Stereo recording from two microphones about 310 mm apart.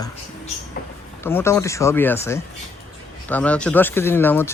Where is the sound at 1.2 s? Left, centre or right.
Centre.